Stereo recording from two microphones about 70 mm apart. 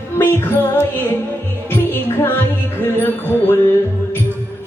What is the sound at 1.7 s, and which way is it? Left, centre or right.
Music, left.